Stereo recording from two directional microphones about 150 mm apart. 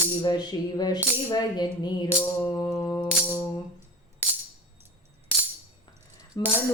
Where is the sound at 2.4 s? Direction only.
20° left (ahead or behind).